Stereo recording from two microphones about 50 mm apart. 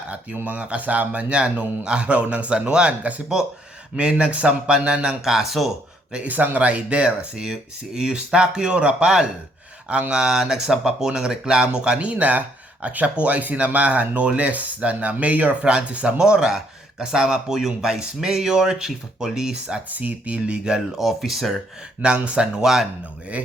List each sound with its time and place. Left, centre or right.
0.4 s speech: right; by 5.7 s centre
6.2 s speech: right; by 19.8 s centre
19.9 s speech: right
21.0 s speech: centre
22.0 s speech: right
22.6 s speech: centre